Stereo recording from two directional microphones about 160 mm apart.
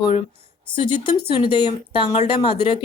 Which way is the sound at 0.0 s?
40° left (ahead or behind).